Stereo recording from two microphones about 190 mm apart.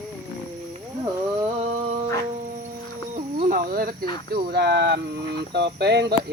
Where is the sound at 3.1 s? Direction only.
50° right (ahead or behind).